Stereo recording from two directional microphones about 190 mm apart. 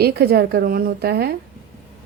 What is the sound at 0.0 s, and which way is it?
A woman's voice, 55° right (ahead or behind).